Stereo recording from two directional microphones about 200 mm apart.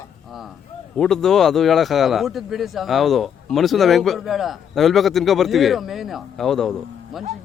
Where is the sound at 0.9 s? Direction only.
Centre (ahead or behind).